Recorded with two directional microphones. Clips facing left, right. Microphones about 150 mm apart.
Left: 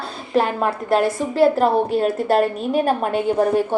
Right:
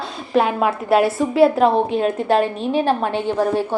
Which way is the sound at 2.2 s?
40° left (ahead or behind).